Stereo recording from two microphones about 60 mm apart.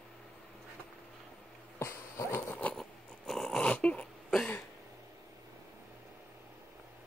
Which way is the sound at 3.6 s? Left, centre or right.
Left.